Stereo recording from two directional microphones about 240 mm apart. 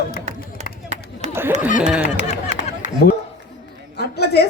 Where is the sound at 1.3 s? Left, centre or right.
Centre.